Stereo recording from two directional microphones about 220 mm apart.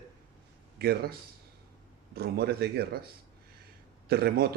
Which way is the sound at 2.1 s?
45° right (ahead or behind).